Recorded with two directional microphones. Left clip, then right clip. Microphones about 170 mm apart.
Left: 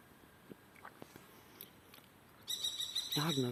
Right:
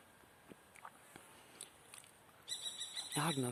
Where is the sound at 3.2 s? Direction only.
20° right (ahead or behind).